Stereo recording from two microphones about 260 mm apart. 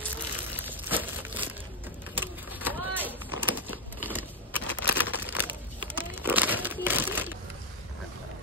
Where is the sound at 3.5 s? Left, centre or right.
Centre.